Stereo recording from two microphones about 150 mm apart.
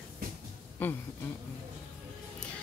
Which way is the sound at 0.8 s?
15° left (ahead or behind).